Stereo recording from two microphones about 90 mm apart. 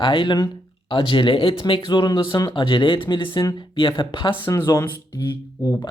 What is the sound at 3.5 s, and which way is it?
Speech, 70° left (ahead or behind).